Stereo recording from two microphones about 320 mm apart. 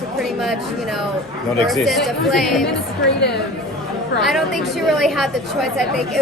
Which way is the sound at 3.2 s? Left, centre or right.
Left.